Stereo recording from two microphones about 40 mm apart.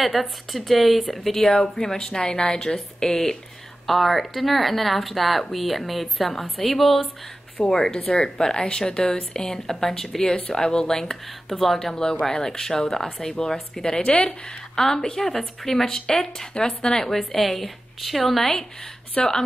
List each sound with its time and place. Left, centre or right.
0.0 s speech: centre
7.6 s speech: centre
11.9 s speech: centre
19.2 s speech: left